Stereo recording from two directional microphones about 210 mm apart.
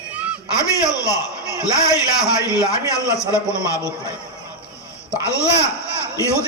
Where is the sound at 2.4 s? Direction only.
15° left (ahead or behind).